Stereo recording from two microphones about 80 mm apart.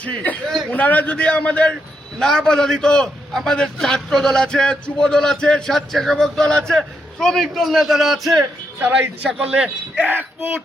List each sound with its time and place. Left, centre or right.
0.0 s a man's voice: centre
2.1 s a man's voice: centre
9.2 s speech: centre